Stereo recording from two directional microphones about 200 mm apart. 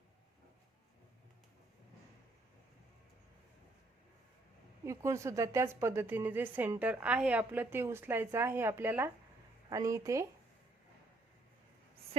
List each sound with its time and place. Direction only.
4.9 s a woman's voice: 15° right (ahead or behind)